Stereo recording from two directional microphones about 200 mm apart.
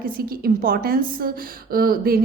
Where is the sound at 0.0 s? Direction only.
45° right (ahead or behind).